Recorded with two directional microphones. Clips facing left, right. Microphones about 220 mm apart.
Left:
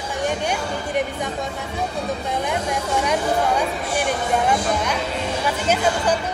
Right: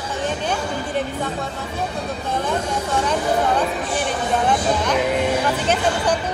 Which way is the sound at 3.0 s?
10° left (ahead or behind).